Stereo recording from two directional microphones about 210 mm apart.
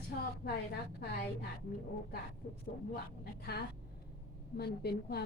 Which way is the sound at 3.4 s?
50° left (ahead or behind).